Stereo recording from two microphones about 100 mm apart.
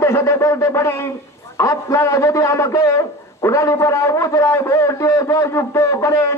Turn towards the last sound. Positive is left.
turn(degrees=30)  # may be behind; listen again after turning